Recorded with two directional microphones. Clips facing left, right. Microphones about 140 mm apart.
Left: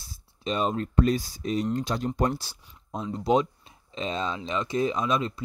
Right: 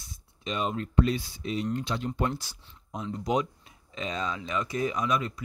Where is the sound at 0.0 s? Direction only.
35° left (ahead or behind).